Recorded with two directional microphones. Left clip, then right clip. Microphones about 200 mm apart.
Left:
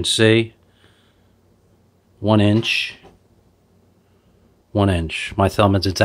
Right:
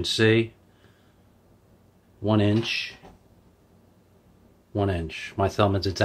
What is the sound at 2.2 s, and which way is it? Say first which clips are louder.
Speech: left 6 dB; 40° left (ahead or behind).